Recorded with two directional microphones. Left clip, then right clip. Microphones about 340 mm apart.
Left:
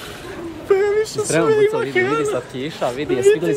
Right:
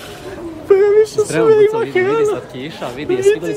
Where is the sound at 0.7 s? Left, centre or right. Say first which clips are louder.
Right 6 dB; centre.